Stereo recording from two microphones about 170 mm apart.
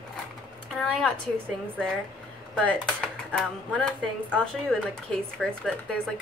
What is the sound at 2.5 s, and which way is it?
Speech, 5° left (ahead or behind).